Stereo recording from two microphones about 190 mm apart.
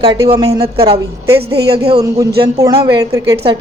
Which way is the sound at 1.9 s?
20° right (ahead or behind).